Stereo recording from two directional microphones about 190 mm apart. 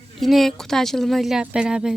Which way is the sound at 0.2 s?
Centre (ahead or behind).